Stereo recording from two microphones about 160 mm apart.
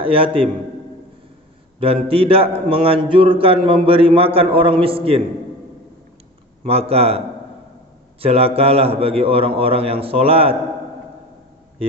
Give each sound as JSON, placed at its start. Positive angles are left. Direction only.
{"t": 0.0, "sound": "a man's voice", "side_deg": -35}
{"t": 1.8, "sound": "a man's voice", "side_deg": -35}
{"t": 6.6, "sound": "a man's voice", "side_deg": -40}